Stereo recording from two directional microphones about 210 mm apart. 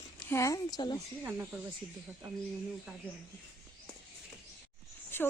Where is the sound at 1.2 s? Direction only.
10° right (ahead or behind).